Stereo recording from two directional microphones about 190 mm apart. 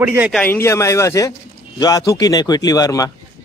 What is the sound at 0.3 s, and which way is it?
Speech, 10° left (ahead or behind).